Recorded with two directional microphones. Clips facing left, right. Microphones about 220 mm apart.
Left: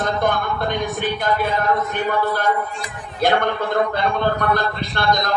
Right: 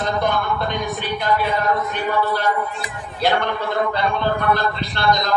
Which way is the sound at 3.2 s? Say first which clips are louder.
Left 2 dB; 50° left (ahead or behind).